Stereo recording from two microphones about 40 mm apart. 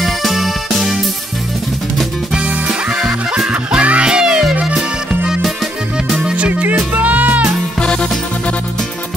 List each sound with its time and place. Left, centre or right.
0.0 s music: centre
3.7 s music: right
4.1 s music: centre
6.3 s music: right
7.8 s music: left